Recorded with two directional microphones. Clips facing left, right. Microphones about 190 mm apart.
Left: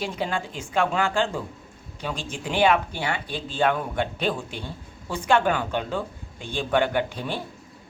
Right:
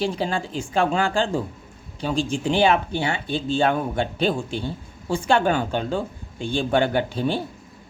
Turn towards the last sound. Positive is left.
turn(degrees=-30)  # may be behind; listen again after turning